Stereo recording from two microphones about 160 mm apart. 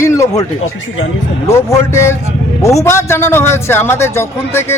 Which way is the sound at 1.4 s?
15° left (ahead or behind).